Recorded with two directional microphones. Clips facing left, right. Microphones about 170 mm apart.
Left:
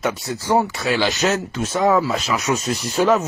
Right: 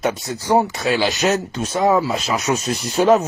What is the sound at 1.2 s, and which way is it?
Speech, 20° right (ahead or behind).